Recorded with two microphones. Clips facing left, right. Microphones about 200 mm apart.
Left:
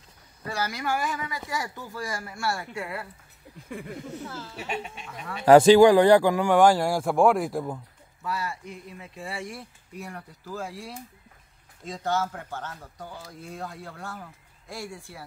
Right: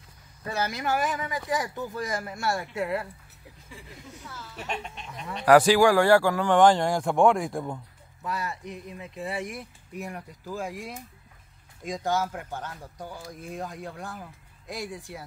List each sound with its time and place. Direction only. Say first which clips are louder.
0.5 s speech: right 1 dB; 20° right (ahead or behind)
3.6 s speech: left 12 dB; 60° left (ahead or behind)
4.3 s a woman's voice: left 5 dB; 30° left (ahead or behind)
4.6 s speech: even; 5° left (ahead or behind)
5.4 s speech: left 4 dB; 25° left (ahead or behind); by 7.8 s 5° left (ahead or behind)
8.3 s speech: even; 20° right (ahead or behind)